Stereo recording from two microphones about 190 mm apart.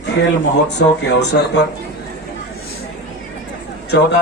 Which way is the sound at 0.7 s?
65° left (ahead or behind).